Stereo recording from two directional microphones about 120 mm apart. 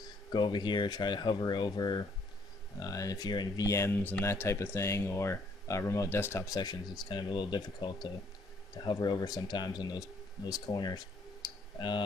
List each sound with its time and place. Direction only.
0.3 s speech: 40° left (ahead or behind)